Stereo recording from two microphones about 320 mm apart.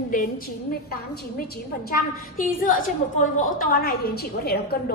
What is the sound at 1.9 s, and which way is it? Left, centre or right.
A woman's voice, left.